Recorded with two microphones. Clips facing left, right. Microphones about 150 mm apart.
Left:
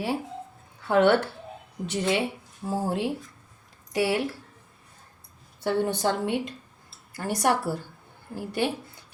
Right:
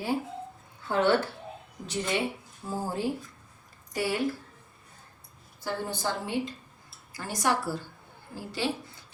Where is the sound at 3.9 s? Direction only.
75° left (ahead or behind).